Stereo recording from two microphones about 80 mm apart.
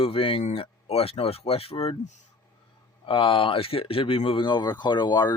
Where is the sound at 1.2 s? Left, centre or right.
Left.